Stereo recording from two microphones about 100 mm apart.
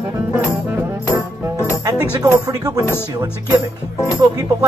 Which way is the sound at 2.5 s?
35° right (ahead or behind).